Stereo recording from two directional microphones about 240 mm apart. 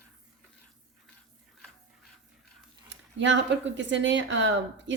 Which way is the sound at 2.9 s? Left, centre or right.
Right.